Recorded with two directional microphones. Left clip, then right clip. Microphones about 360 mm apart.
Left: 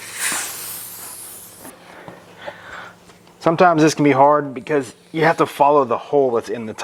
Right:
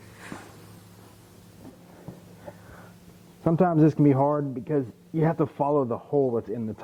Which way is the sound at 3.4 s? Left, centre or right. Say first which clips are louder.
Left 9 dB; centre.